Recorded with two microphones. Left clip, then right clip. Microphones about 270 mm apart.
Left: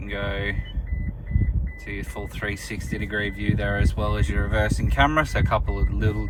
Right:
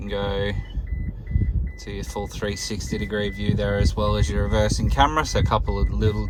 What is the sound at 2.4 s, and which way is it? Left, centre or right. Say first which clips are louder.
Speech: left 2 dB; centre.